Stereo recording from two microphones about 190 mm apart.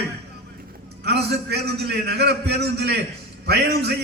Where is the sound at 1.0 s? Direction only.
60° right (ahead or behind).